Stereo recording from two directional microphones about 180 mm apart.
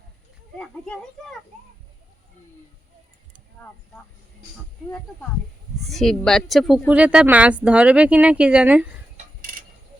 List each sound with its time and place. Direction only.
0.6 s speech: 5° left (ahead or behind)
5.8 s speech: centre (ahead or behind)
9.1 s mechanisms: 50° right (ahead or behind)